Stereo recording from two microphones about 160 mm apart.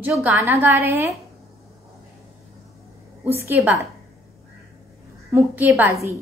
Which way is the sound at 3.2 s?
15° right (ahead or behind).